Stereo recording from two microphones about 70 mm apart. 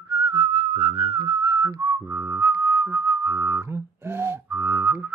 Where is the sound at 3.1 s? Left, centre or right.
Right.